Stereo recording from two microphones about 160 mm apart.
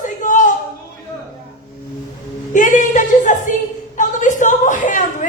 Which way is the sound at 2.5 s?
55° left (ahead or behind).